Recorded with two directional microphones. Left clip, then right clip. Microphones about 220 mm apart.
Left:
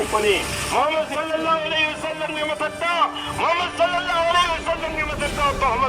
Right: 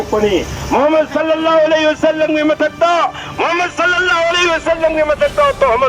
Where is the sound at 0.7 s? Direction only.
45° right (ahead or behind).